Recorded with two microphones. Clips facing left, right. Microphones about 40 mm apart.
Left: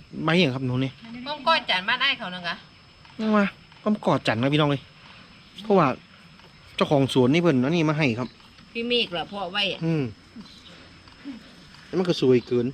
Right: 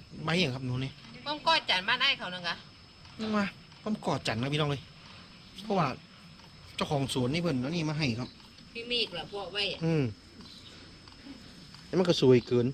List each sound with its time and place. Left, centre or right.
0.2 s a man's voice: left
9.8 s a man's voice: left
10.7 s a sound: left
11.9 s speech: left
12.5 s a man's voice: left